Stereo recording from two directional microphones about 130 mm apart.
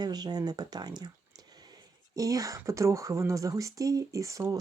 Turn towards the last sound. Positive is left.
turn(degrees=-25)  # may be behind; listen again after turning